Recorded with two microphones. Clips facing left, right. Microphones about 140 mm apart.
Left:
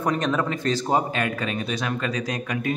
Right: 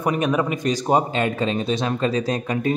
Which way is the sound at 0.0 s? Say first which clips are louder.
Right 3 dB; 10° right (ahead or behind).